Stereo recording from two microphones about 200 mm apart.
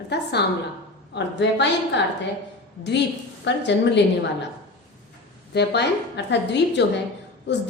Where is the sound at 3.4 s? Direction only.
60° left (ahead or behind).